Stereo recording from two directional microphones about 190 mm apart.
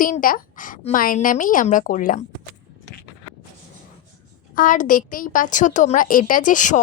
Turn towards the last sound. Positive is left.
turn(degrees=40)  # may be behind; listen again after turning